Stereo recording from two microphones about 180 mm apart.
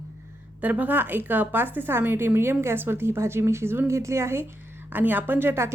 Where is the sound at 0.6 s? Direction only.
10° right (ahead or behind).